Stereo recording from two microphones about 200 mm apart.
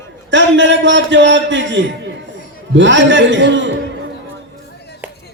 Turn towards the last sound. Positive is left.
turn(degrees=-65)  # may be behind; listen again after turning